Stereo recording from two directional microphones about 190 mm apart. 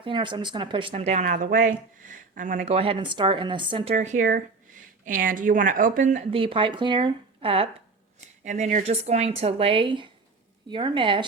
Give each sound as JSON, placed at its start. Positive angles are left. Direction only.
{"t": 0.0, "sound": "speech", "side_deg": -25}
{"t": 3.9, "sound": "a woman's voice", "side_deg": -40}
{"t": 6.3, "sound": "speech", "side_deg": -30}
{"t": 8.4, "sound": "speech", "side_deg": -40}